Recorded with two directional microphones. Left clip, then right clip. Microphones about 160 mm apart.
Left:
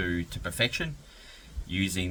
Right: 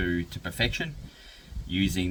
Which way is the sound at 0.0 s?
25° left (ahead or behind).